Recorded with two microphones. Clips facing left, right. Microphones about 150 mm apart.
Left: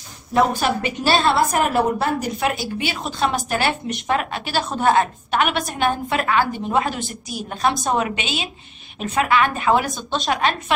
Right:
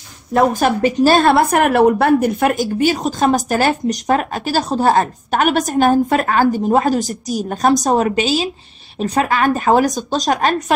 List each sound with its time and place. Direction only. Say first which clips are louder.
0.3 s a woman's voice: right 4 dB; 50° right (ahead or behind)